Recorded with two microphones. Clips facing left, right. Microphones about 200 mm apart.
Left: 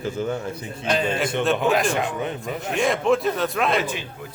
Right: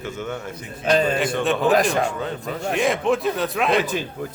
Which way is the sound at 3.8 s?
40° right (ahead or behind).